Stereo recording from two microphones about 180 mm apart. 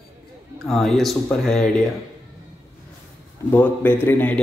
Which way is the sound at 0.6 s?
Centre (ahead or behind).